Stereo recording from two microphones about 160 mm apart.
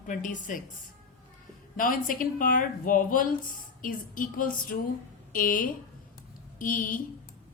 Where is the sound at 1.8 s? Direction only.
60° left (ahead or behind).